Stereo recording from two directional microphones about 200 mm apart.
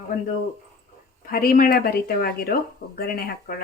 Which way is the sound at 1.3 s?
45° left (ahead or behind).